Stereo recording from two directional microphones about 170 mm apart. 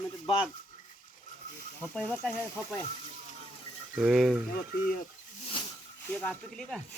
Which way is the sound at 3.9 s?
Centre (ahead or behind).